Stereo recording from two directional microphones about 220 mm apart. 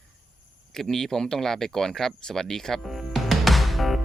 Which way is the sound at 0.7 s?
Centre (ahead or behind).